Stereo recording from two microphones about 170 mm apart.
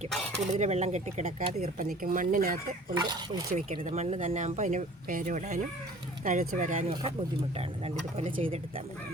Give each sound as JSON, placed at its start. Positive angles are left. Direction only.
{"t": 0.3, "sound": "speech", "side_deg": -40}
{"t": 2.0, "sound": "speech", "side_deg": -55}
{"t": 2.9, "sound": "speech", "side_deg": -25}
{"t": 3.5, "sound": "speech", "side_deg": -40}
{"t": 7.9, "sound": "speech", "side_deg": -35}